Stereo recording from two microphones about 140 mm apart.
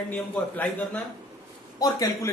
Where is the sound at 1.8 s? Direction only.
25° left (ahead or behind).